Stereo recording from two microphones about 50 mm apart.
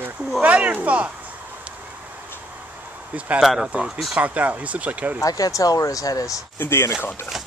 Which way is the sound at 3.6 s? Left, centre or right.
Centre.